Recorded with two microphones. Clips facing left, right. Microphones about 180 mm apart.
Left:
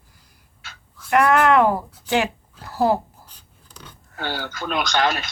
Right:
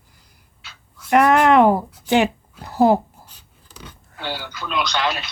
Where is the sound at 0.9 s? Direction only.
15° right (ahead or behind).